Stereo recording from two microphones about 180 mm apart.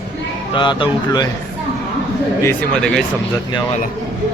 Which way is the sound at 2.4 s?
5° left (ahead or behind).